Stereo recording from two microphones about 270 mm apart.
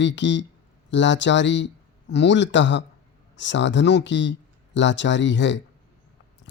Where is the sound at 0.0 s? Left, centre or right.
Left.